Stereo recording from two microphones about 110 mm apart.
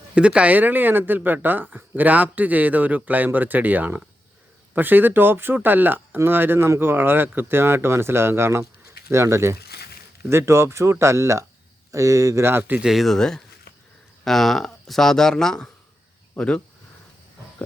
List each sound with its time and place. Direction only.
0.1 s speech: 10° right (ahead or behind)
12.9 s speech: centre (ahead or behind)